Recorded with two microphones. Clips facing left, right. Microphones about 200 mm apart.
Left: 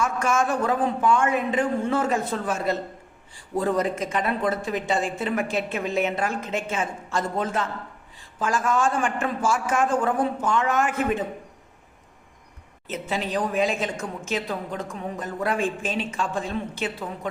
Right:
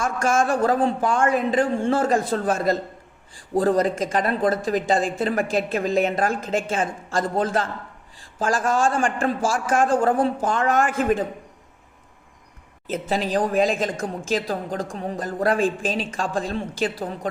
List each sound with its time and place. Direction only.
0.0 s speech: 30° right (ahead or behind)
12.9 s speech: 35° right (ahead or behind)